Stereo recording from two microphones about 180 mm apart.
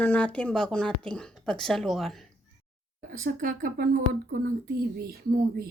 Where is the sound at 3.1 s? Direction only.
50° right (ahead or behind).